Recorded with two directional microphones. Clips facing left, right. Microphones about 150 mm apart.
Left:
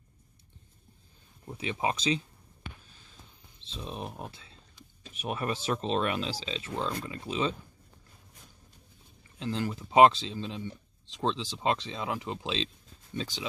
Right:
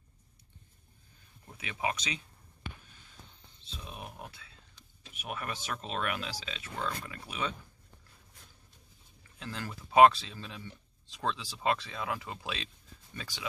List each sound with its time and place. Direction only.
1.6 s speech: 25° left (ahead or behind)
3.7 s speech: 30° left (ahead or behind)
9.4 s speech: 25° left (ahead or behind)